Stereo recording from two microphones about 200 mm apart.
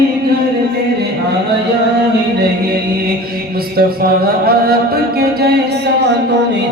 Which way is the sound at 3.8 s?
50° right (ahead or behind).